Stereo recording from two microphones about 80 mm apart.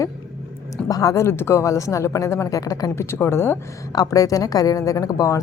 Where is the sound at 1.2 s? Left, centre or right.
Left.